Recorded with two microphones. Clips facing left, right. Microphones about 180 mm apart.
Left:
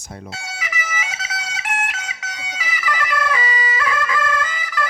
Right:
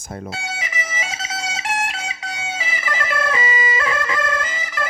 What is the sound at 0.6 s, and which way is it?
Music, 30° right (ahead or behind).